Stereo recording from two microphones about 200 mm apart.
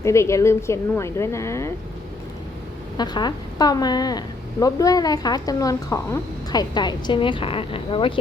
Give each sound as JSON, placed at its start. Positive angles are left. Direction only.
{"t": 0.0, "sound": "a woman's voice", "side_deg": 15}
{"t": 3.0, "sound": "speech", "side_deg": 20}